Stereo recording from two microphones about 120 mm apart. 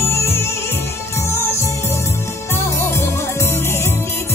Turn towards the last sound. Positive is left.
turn(degrees=20)  # may be behind; listen again after turning